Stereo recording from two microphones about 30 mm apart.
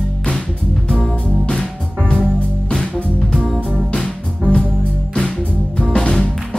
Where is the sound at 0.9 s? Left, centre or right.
Left.